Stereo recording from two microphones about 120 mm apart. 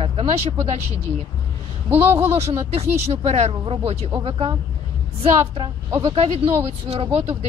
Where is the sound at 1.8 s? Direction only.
20° right (ahead or behind).